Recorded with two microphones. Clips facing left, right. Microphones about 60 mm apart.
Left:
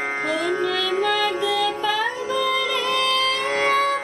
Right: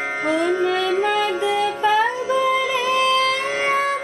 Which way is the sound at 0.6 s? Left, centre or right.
Right.